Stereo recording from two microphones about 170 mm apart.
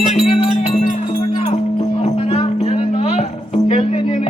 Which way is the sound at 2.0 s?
40° left (ahead or behind).